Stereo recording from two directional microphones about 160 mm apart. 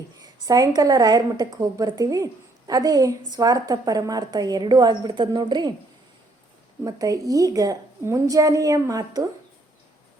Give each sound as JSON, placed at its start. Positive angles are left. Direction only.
{"t": 0.2, "sound": "a woman's voice", "side_deg": -20}
{"t": 6.8, "sound": "a woman's voice", "side_deg": -20}